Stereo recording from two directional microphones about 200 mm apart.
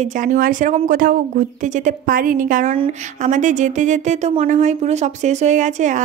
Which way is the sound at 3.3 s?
40° right (ahead or behind).